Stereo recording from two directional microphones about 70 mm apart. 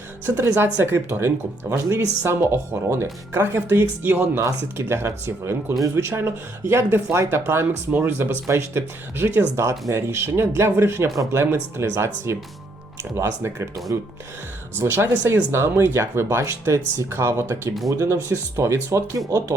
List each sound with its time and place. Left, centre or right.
0.3 s speech: right